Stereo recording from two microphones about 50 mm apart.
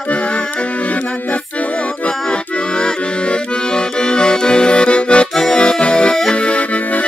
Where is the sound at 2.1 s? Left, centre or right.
Centre.